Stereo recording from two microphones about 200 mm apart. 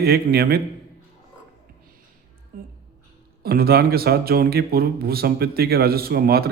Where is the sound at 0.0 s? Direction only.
50° right (ahead or behind).